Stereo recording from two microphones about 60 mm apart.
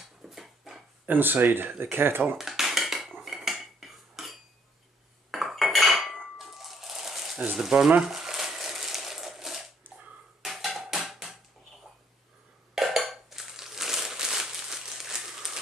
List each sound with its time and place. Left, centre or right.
0.2 s dog: centre
1.0 s speech: right
2.3 s dishes: centre
3.2 s cutlery: centre
6.3 s music: centre
7.3 s speech: centre
8.0 s crumpling: centre
10.4 s a sound: centre
12.7 s dishes: centre